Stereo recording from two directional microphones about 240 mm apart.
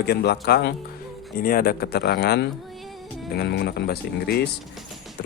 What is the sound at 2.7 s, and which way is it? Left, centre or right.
Music, centre.